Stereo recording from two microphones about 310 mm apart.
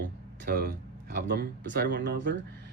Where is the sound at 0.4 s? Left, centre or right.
Right.